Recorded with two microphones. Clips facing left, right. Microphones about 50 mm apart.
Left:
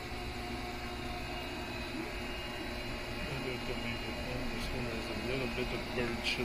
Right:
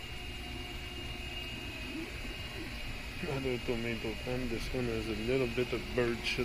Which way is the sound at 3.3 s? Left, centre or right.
Left.